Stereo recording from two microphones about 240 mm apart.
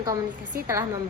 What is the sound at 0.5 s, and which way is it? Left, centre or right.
Speech, right.